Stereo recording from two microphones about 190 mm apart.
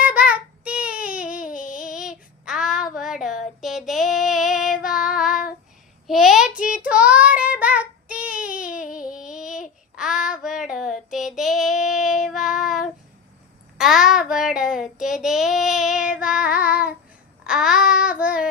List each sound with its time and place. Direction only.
0.0 s child singing: 5° right (ahead or behind)
1.5 s a sound: 45° left (ahead or behind)
1.9 s child singing: 5° right (ahead or behind)